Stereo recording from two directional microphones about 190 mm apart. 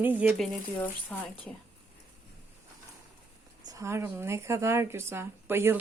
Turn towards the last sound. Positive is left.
turn(degrees=-10)  # may be behind; listen again after turning